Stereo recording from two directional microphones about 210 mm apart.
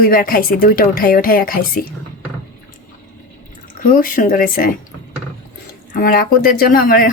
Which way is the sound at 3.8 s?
40° left (ahead or behind).